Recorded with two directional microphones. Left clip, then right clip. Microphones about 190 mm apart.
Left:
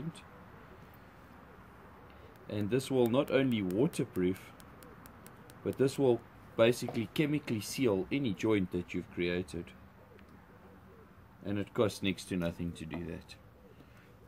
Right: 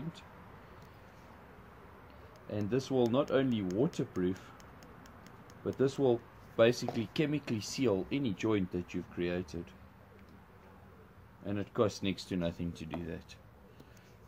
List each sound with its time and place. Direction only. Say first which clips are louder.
2.7 s speech: left 1 dB; 15° left (ahead or behind)
5.7 s speech: left 1 dB; 20° left (ahead or behind)
11.4 s speech: even; 15° left (ahead or behind)